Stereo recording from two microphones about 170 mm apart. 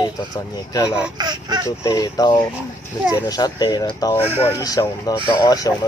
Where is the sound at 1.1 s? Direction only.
25° right (ahead or behind).